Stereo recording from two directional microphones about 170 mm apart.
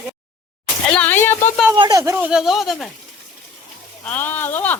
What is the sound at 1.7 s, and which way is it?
Speech, 30° right (ahead or behind).